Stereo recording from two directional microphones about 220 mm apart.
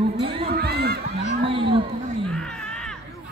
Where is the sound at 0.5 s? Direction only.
45° right (ahead or behind).